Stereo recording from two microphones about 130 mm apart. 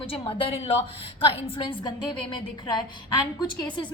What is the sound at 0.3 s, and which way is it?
A woman's voice, 45° left (ahead or behind).